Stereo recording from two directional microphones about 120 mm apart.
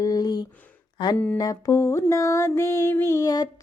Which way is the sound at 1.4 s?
30° left (ahead or behind).